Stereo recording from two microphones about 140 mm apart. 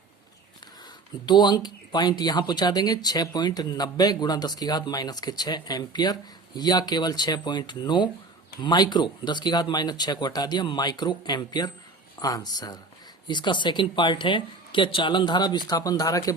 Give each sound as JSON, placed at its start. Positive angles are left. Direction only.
{"t": 1.3, "sound": "speech", "side_deg": 30}